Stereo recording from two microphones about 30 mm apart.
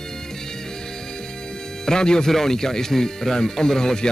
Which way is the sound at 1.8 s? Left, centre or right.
Left.